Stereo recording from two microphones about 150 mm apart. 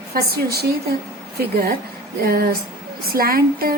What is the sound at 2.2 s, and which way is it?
Speech, 90° right.